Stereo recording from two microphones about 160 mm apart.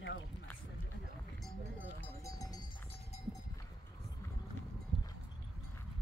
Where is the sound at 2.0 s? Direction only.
20° left (ahead or behind).